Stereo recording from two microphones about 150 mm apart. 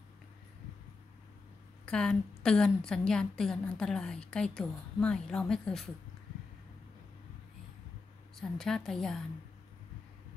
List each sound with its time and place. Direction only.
1.9 s a woman's voice: 5° left (ahead or behind)
8.4 s a woman's voice: 5° left (ahead or behind)